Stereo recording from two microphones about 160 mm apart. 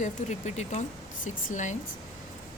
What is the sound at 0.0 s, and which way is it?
Speech, 45° left (ahead or behind).